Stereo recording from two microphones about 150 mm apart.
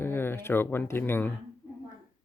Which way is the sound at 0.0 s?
15° left (ahead or behind).